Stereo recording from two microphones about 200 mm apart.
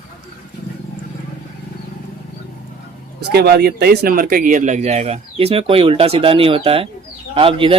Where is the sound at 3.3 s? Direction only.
55° right (ahead or behind).